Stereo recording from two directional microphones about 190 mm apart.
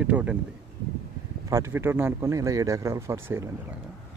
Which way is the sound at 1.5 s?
15° right (ahead or behind).